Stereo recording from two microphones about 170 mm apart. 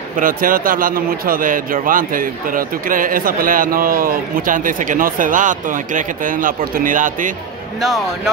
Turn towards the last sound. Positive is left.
turn(degrees=-50)  # may be behind; listen again after turning